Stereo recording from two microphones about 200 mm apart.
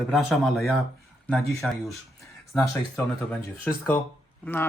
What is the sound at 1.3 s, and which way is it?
Speech, 15° left (ahead or behind).